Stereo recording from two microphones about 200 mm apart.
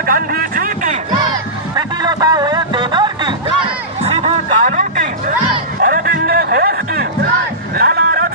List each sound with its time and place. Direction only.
0.0 s a man's voice: 45° right (ahead or behind)
1.3 s music: 20° right (ahead or behind)
4.6 s music: 40° right (ahead or behind)
7.8 s a sound: 50° right (ahead or behind)